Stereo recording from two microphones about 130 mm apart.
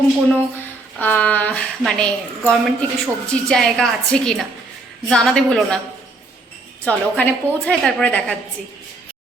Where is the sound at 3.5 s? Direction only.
5° left (ahead or behind).